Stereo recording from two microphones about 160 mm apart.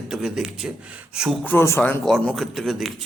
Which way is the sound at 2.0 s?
Centre (ahead or behind).